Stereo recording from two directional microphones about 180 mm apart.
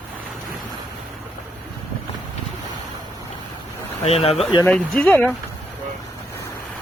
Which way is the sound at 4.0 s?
35° left (ahead or behind).